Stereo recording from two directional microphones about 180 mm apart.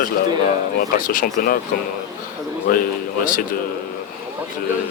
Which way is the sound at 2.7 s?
50° left (ahead or behind).